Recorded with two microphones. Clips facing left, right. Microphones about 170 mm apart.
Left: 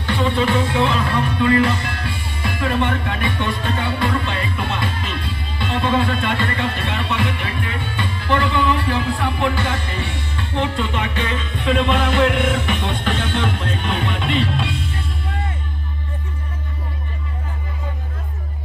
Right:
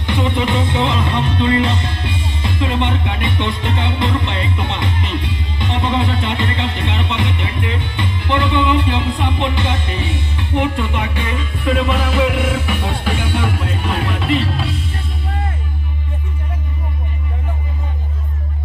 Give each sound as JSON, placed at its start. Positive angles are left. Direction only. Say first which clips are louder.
{"t": 0.0, "sound": "music", "louder": "even", "side_deg": -15}